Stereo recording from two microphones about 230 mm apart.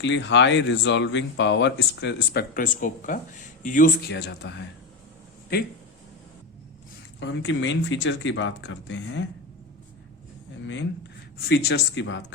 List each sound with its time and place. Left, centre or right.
0.0 s speech: left
7.2 s speech: left
11.4 s speech: left